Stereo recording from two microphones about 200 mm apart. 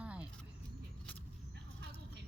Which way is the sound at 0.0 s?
5° right (ahead or behind).